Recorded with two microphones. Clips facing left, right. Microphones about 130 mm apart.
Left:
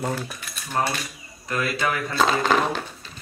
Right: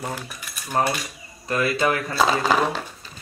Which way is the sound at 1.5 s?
30° right (ahead or behind).